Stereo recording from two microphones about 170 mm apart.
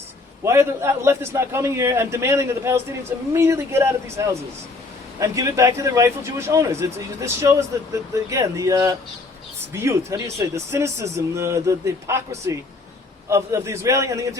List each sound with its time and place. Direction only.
0.4 s a man's voice: 15° right (ahead or behind)